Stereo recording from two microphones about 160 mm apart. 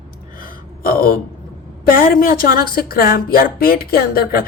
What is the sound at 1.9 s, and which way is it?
Speech, 65° left (ahead or behind).